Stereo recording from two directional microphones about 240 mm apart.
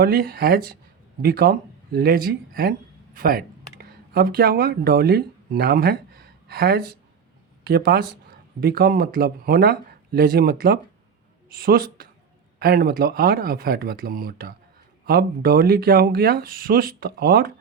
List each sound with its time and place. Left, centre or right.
0.0 s speech: right